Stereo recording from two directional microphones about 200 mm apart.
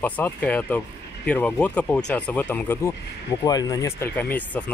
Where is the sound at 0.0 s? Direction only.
10° left (ahead or behind).